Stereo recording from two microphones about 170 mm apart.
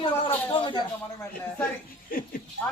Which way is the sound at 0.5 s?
30° left (ahead or behind).